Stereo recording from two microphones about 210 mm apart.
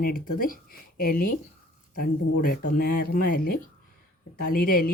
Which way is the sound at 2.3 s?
45° left (ahead or behind).